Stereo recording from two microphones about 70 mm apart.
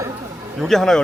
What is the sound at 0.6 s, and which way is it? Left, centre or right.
Speech, centre.